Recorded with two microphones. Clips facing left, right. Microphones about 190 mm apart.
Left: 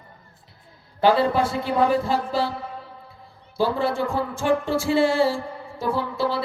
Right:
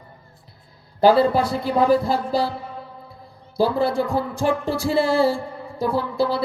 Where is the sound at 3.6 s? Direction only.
35° right (ahead or behind).